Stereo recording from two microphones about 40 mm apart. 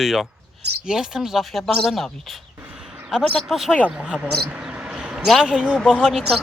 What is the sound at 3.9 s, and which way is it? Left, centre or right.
Speech, right.